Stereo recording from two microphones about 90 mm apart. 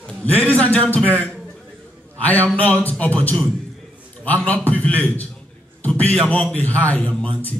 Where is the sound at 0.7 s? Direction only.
15° left (ahead or behind).